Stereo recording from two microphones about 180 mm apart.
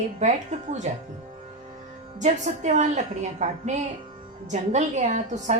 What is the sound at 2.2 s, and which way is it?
A woman's voice, 40° right (ahead or behind).